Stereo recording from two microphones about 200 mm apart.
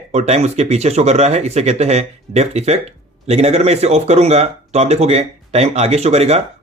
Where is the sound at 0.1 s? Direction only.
35° right (ahead or behind).